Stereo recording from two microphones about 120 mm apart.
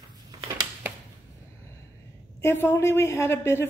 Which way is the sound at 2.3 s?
20° left (ahead or behind).